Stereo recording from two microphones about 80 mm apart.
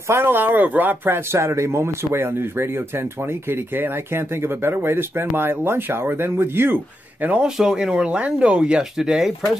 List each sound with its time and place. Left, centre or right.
0.1 s speech: right
7.2 s speech: centre